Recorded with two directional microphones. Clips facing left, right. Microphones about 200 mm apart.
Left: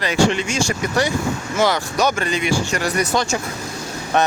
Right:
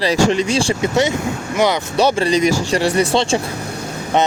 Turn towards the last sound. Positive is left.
turn(degrees=-20)  # may be behind; listen again after turning